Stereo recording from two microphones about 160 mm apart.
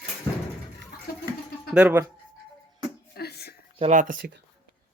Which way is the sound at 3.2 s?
90° left.